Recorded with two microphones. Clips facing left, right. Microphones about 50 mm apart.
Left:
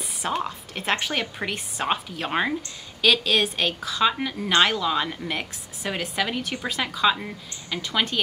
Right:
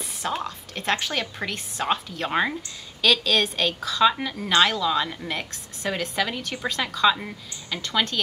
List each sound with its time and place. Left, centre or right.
0.0 s a woman's voice: centre